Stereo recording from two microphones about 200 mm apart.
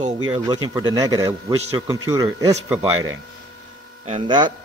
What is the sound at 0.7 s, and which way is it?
A man's voice, 20° right (ahead or behind).